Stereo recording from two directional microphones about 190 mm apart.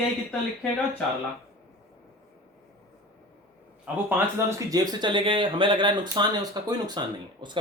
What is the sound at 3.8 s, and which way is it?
Speech, 15° right (ahead or behind).